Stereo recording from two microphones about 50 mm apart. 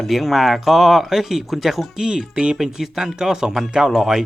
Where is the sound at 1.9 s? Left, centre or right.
Centre.